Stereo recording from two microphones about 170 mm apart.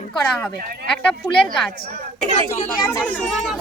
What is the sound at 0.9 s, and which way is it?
Speech, 5° left (ahead or behind).